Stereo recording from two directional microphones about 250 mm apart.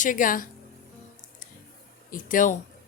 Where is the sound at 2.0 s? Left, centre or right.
Left.